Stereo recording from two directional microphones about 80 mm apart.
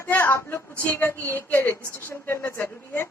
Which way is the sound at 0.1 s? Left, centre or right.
Left.